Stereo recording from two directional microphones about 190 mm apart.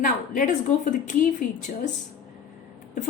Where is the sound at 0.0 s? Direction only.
45° left (ahead or behind).